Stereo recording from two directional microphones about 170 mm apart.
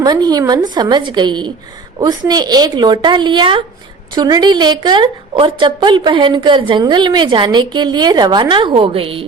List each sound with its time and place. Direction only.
0.0 s a woman's voice: 25° right (ahead or behind)